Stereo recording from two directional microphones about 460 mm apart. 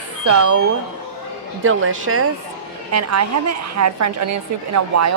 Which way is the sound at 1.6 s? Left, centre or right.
Right.